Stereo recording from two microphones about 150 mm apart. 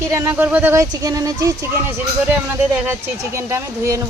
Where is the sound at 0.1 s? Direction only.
15° right (ahead or behind).